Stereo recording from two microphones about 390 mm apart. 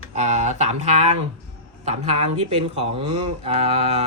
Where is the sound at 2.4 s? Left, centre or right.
Centre.